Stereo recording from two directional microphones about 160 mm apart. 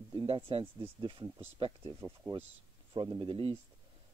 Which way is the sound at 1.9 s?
15° right (ahead or behind).